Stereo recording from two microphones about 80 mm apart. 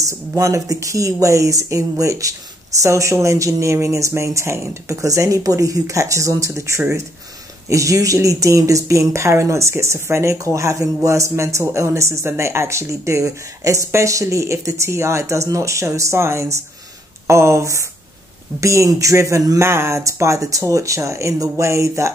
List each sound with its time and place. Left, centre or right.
0.0 s speech: right
19.6 s speech: right